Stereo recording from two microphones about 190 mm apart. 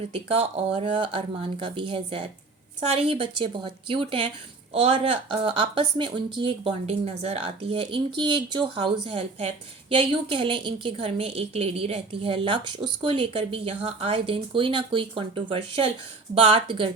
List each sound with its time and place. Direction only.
0.1 s a woman's voice: 30° right (ahead or behind)